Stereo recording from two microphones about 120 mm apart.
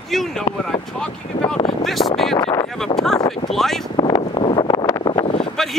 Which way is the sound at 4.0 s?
45° left (ahead or behind).